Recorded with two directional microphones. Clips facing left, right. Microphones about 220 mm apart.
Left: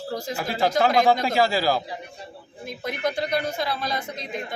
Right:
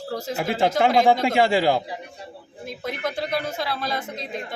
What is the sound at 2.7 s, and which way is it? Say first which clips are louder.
Speech: left 1 dB; centre (ahead or behind).